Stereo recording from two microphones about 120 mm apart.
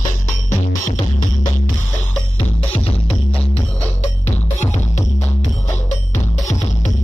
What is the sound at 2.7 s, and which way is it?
Music, 55° left (ahead or behind).